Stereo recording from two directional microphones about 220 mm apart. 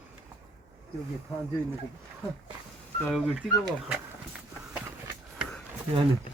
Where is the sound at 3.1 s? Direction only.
Centre (ahead or behind).